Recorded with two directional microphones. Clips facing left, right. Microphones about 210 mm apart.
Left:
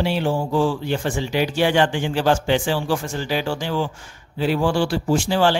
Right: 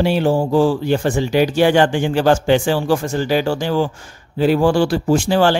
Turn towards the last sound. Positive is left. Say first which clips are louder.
# right 4 dB
turn(degrees=-50)  # may be behind; listen again after turning